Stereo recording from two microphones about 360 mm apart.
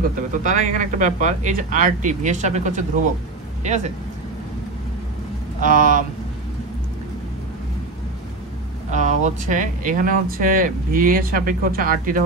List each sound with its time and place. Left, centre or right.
0.1 s speech: right
5.6 s speech: right
8.9 s speech: centre